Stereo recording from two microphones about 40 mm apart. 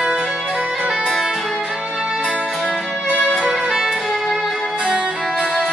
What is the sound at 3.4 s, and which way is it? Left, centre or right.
Music, centre.